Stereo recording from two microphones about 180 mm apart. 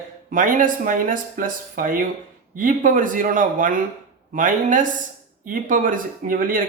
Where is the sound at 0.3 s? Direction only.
50° right (ahead or behind).